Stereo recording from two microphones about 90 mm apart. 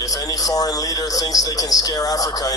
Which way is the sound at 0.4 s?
45° left (ahead or behind).